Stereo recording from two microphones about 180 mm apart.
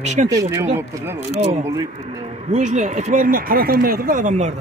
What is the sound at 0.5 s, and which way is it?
Speech, 15° right (ahead or behind).